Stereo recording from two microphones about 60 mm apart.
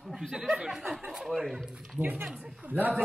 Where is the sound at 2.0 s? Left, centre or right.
Right.